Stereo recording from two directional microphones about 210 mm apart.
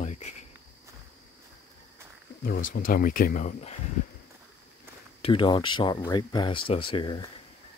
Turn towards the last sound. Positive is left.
turn(degrees=25)  # may be behind; listen again after turning